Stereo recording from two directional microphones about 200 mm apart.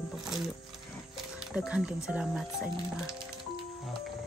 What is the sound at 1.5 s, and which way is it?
Speech, 5° right (ahead or behind).